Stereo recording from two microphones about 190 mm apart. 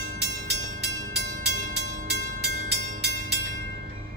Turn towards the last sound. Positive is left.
turn(degrees=-60)  # may be behind; listen again after turning